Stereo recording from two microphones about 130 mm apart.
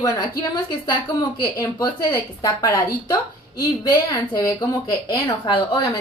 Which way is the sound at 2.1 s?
25° left (ahead or behind).